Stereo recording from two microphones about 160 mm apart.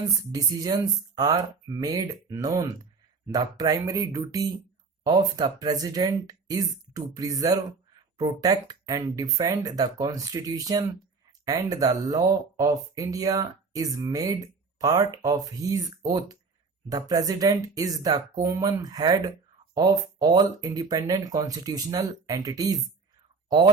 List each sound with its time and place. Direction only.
0.3 s speech: 25° right (ahead or behind)